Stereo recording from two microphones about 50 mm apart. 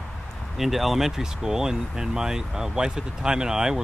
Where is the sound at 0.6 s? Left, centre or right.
Centre.